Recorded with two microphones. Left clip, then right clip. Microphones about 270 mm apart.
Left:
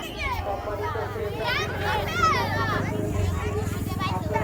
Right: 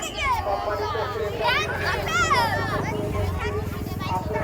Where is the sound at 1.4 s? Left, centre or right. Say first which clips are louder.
Right 4 dB; right.